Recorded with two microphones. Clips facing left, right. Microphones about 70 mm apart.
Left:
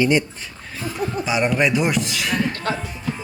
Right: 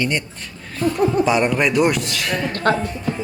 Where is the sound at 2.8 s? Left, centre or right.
Centre.